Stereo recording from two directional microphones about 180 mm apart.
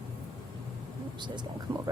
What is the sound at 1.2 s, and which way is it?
Speech, 25° right (ahead or behind).